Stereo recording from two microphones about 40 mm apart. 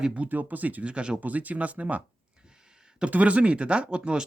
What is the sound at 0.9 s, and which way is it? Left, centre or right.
Speech, right.